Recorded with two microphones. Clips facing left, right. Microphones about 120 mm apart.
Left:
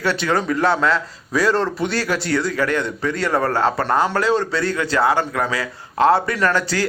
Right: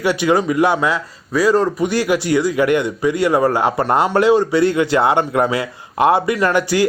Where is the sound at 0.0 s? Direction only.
15° right (ahead or behind).